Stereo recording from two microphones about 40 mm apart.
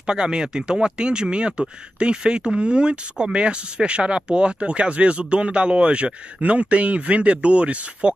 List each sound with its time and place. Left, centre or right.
0.0 s speech: right